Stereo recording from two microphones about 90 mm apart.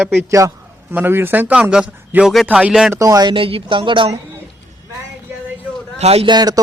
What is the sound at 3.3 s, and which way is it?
Speech, 90° right.